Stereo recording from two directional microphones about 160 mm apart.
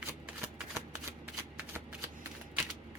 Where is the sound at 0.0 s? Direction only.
15° right (ahead or behind).